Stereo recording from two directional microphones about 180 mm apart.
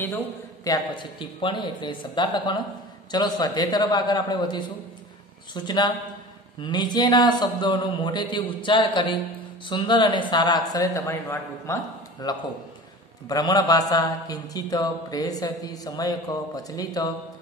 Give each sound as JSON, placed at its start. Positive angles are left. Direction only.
{"t": 0.7, "sound": "a man's voice", "side_deg": 25}